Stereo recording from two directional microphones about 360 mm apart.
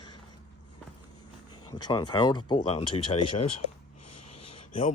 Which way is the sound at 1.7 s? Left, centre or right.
Centre.